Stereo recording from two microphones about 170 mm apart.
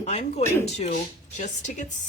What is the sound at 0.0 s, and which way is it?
A woman's voice, 40° left (ahead or behind).